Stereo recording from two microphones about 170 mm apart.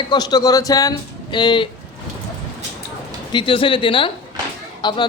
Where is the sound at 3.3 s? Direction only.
30° left (ahead or behind).